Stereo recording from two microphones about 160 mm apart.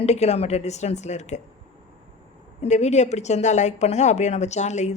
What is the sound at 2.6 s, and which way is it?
Speech, 45° left (ahead or behind).